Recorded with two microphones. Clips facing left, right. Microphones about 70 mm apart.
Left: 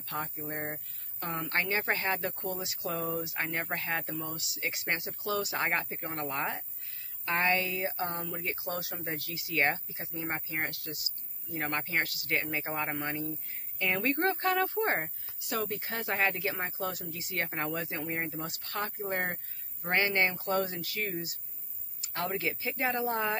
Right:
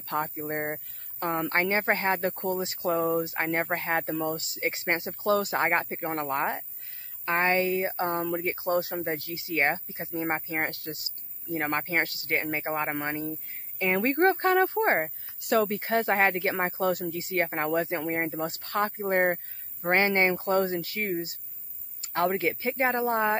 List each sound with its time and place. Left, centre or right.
0.0 s speech: right
15.4 s speech: right